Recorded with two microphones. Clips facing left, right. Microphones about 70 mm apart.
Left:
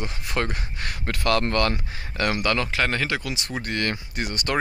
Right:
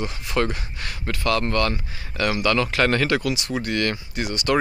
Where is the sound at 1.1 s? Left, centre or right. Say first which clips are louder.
Even; left.